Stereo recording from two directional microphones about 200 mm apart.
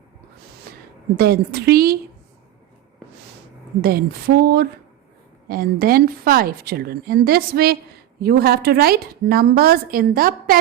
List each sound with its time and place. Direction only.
0.7 s a sound: 50° right (ahead or behind)
1.1 s a woman's voice: 50° right (ahead or behind)
3.8 s a woman's voice: 50° right (ahead or behind)